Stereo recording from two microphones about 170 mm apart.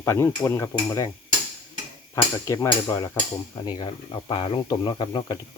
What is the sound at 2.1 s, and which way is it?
Speech, 20° left (ahead or behind).